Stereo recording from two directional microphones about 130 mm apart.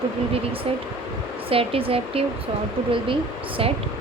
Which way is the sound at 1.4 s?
45° right (ahead or behind).